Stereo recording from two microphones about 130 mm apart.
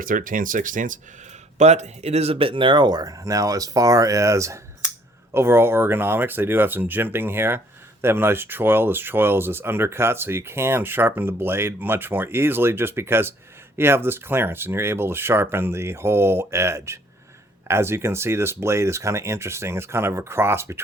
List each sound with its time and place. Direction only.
0.0 s speech: 90° right
1.5 s speech: 60° right (ahead or behind); by 20.8 s 20° right (ahead or behind)